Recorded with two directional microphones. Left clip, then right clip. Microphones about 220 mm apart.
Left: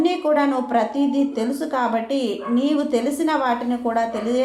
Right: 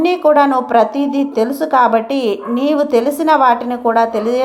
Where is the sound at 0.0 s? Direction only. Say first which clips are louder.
Right 8 dB; 30° right (ahead or behind).